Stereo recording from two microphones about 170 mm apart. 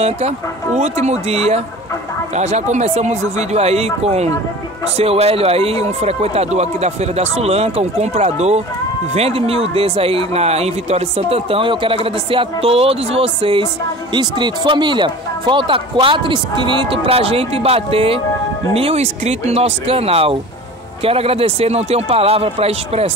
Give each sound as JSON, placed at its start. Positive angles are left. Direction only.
{"t": 0.7, "sound": "speech", "side_deg": -40}